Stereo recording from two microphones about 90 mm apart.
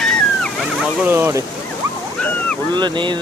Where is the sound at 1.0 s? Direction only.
25° right (ahead or behind).